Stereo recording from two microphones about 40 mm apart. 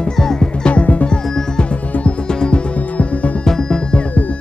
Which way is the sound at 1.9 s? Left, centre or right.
Left.